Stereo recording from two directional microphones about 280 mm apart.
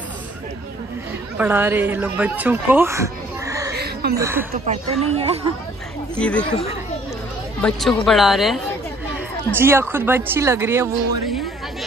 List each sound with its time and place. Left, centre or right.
1.4 s speech: centre
3.7 s a sound: right
4.2 s speech: centre
5.1 s speech: right
6.1 s a woman's voice: centre
7.6 s a woman's voice: centre